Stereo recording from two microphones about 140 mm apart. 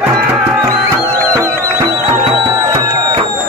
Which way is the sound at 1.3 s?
20° right (ahead or behind).